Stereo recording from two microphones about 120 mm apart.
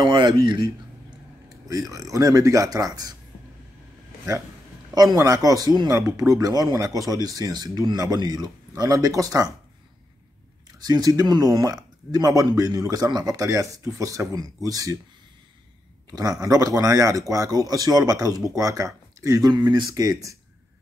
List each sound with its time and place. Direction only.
0.0 s speech: 40° right (ahead or behind)
1.7 s speech: 30° right (ahead or behind)
4.9 s speech: 30° right (ahead or behind)
10.8 s speech: 30° right (ahead or behind)
16.1 s speech: 30° right (ahead or behind)